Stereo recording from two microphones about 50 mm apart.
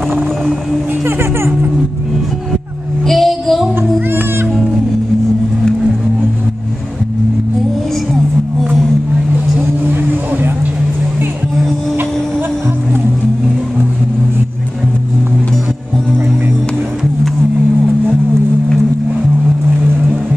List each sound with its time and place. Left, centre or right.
3.1 s child singing: centre
9.8 s vehicle: right